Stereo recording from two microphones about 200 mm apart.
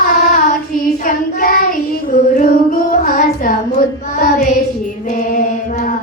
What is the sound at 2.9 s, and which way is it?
Child singing, 40° left (ahead or behind).